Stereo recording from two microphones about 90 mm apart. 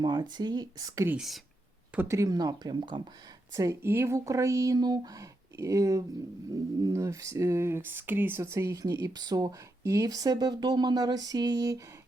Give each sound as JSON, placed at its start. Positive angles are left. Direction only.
{"t": 0.0, "sound": "speech", "side_deg": -55}
{"t": 1.1, "sound": "speech", "side_deg": -5}
{"t": 2.0, "sound": "speech", "side_deg": -35}
{"t": 3.5, "sound": "speech", "side_deg": -35}
{"t": 4.8, "sound": "speech", "side_deg": -45}